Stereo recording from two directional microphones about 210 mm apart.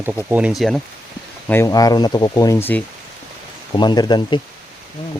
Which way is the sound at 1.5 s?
15° left (ahead or behind).